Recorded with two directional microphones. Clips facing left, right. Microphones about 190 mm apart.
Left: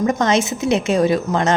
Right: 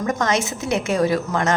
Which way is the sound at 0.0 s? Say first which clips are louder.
Left 4 dB; 25° left (ahead or behind).